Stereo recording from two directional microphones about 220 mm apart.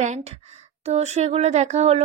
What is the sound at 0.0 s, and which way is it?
Speech, 30° right (ahead or behind).